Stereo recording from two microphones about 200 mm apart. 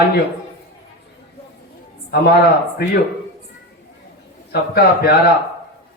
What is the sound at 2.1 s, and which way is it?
Speech, 50° left (ahead or behind).